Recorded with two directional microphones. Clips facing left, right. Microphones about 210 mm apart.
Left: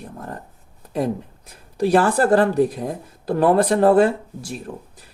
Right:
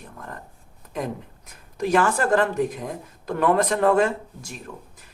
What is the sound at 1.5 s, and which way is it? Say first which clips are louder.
Speech: left 5 dB; 35° left (ahead or behind).